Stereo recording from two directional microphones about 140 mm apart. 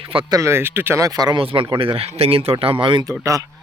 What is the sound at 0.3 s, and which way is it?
Speech, 20° right (ahead or behind).